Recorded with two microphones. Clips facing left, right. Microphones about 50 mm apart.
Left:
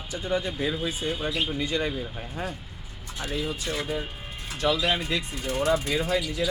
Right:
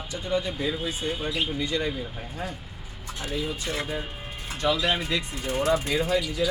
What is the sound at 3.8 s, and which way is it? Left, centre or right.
Speech, centre.